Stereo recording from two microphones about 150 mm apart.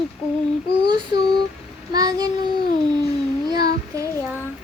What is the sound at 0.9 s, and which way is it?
Child singing, 30° right (ahead or behind).